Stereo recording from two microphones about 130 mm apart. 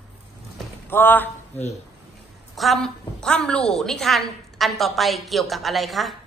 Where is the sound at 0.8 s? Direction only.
15° left (ahead or behind).